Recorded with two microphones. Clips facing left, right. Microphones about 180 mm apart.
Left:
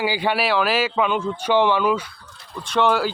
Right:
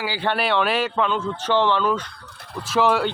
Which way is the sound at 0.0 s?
15° left (ahead or behind).